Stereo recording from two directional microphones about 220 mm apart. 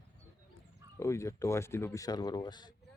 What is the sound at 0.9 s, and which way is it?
Speech, 15° left (ahead or behind).